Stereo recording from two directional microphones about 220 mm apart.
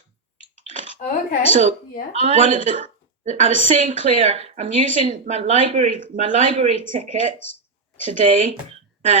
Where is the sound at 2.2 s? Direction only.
30° right (ahead or behind).